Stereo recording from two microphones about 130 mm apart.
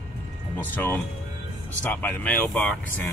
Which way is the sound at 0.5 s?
15° left (ahead or behind).